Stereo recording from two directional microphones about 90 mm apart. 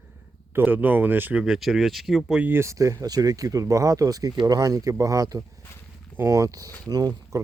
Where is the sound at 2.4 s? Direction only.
25° right (ahead or behind); by 7.4 s 45° right (ahead or behind).